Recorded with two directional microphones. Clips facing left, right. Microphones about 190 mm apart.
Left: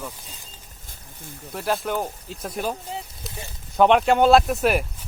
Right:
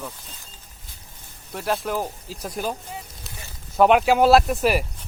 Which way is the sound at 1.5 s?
Centre (ahead or behind).